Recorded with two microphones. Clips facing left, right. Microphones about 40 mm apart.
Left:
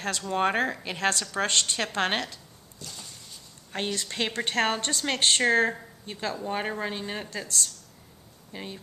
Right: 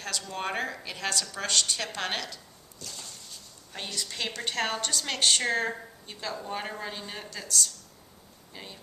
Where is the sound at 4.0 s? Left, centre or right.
Left.